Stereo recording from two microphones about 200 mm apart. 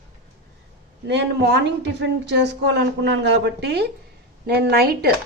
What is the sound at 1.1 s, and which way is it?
A woman's voice, 60° right (ahead or behind).